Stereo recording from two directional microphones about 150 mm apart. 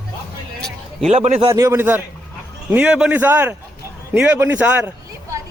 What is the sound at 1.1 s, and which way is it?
Speech, 45° right (ahead or behind).